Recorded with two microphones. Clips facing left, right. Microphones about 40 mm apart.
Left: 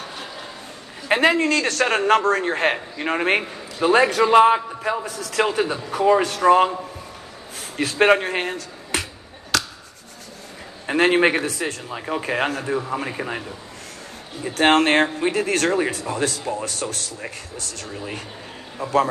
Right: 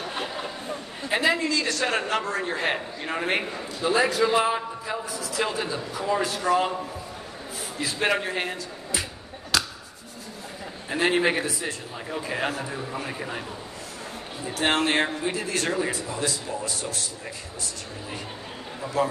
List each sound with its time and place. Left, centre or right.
1.0 s a man's voice: left
7.7 s speech: left
10.9 s speech: left
14.5 s a man's voice: left